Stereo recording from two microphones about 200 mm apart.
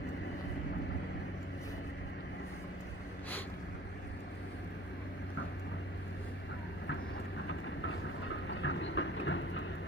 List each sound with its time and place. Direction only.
7.4 s train: 65° left (ahead or behind)